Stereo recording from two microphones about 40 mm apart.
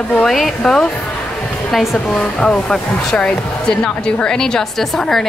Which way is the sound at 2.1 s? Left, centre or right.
Left.